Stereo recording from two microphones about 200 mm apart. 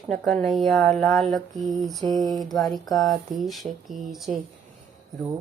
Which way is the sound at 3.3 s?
Centre (ahead or behind).